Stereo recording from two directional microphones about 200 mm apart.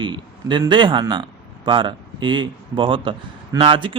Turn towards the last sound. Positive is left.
turn(degrees=-25)  # may be behind; listen again after turning